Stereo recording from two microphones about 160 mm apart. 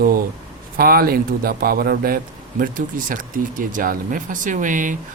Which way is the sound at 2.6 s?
55° right (ahead or behind).